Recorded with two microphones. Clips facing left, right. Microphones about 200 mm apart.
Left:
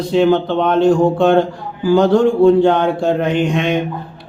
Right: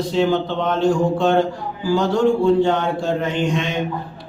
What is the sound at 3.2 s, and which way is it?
Speech, 60° left (ahead or behind).